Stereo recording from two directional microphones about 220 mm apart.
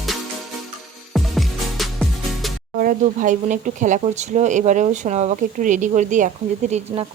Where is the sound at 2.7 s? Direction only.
40° right (ahead or behind).